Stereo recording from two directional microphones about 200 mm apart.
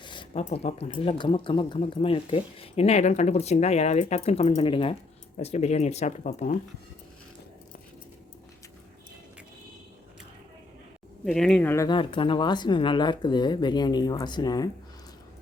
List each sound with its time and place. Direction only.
0.0 s speech: 25° left (ahead or behind)
11.3 s speech: centre (ahead or behind)
11.9 s speech: 25° left (ahead or behind)